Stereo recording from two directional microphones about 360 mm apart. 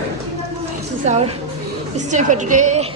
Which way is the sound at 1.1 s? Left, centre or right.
Centre.